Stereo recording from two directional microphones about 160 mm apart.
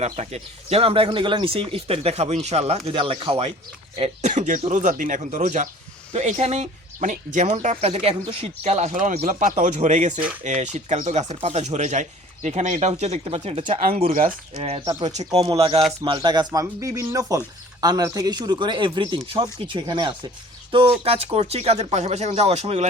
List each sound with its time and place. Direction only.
0.0 s speech: 45° right (ahead or behind)